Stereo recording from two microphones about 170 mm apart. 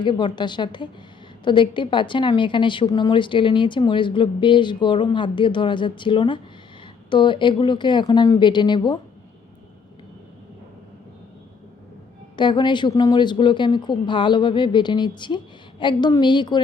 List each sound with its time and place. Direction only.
0.0 s a woman's voice: 25° left (ahead or behind)
12.4 s a woman's voice: 25° left (ahead or behind)